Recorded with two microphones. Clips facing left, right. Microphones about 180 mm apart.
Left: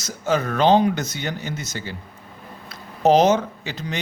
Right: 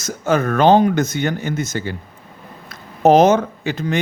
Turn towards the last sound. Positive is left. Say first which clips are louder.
# right 9 dB
turn(degrees=-50)  # may be behind; listen again after turning